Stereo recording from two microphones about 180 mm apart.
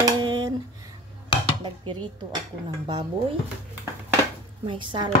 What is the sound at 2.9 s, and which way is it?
Speech, 25° right (ahead or behind).